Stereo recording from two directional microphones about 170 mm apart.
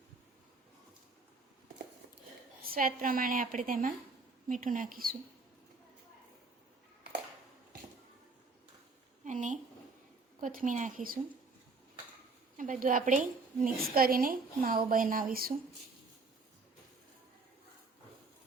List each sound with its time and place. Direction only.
2.6 s a woman's voice: 60° right (ahead or behind)
9.2 s a sound: 45° right (ahead or behind)
10.4 s a woman's voice: 50° right (ahead or behind)
12.5 s a woman's voice: 50° right (ahead or behind)